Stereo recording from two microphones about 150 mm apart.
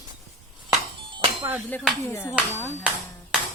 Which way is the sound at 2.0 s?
15° left (ahead or behind).